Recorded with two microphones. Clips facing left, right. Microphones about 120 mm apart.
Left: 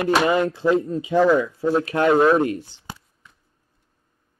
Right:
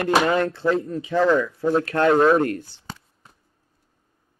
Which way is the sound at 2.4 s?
15° left (ahead or behind).